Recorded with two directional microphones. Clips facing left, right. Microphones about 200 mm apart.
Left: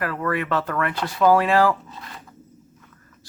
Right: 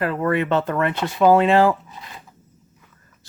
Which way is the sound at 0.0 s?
25° right (ahead or behind).